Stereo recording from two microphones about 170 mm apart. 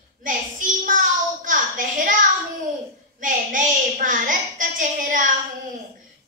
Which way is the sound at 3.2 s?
50° right (ahead or behind).